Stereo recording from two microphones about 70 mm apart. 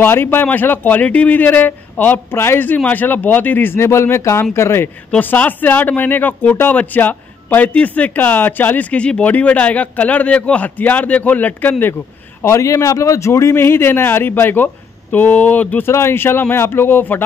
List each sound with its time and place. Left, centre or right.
0.0 s speech: left
5.2 s speech: left
12.4 s speech: left
15.8 s speech: left